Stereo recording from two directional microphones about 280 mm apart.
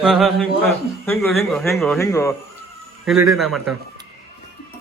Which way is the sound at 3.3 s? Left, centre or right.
Centre.